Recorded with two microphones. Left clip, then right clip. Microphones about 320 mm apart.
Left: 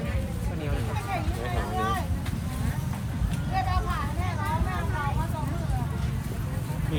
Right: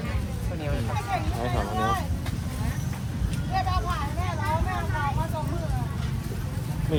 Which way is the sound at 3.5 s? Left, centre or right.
Right.